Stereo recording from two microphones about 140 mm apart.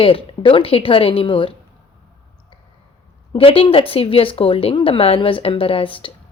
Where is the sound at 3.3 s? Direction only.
40° left (ahead or behind).